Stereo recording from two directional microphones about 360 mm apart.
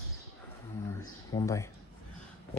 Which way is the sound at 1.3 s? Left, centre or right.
Centre.